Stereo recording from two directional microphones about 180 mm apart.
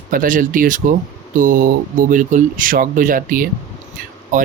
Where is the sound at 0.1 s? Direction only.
50° right (ahead or behind).